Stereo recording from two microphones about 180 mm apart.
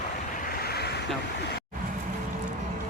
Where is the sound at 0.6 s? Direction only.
65° left (ahead or behind).